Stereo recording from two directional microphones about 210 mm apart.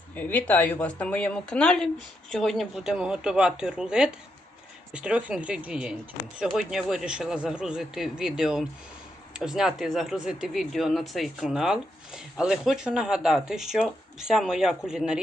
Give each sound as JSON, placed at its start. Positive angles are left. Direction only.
{"t": 0.2, "sound": "speech", "side_deg": 5}